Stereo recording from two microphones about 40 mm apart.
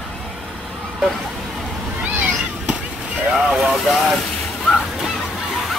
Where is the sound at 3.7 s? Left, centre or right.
Centre.